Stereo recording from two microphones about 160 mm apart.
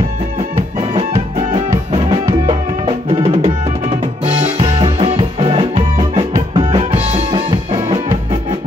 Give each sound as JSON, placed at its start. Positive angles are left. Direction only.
{"t": 0.7, "sound": "music", "side_deg": -35}
{"t": 4.6, "sound": "music", "side_deg": -35}
{"t": 7.1, "sound": "drum", "side_deg": -35}